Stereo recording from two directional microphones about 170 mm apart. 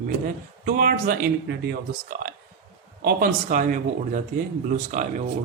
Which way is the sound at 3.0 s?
55° right (ahead or behind).